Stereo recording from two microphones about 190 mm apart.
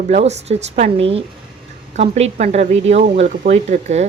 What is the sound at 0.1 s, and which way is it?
A woman's voice, 35° right (ahead or behind).